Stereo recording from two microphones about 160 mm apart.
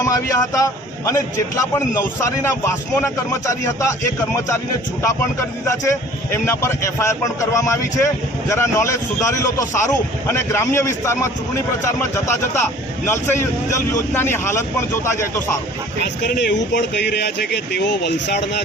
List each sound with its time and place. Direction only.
0.0 s a man's voice: 20° left (ahead or behind)
13.1 s a man's voice: 15° left (ahead or behind)
16.2 s speech: 90° left